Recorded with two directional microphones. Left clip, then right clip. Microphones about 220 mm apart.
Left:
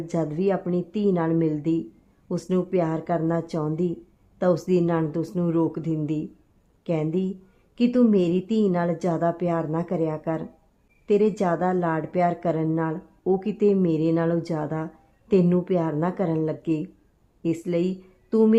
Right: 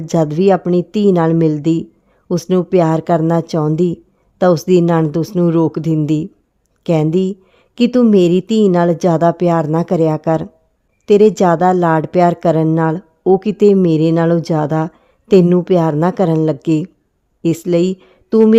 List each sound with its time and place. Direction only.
0.0 s a woman's voice: 45° right (ahead or behind)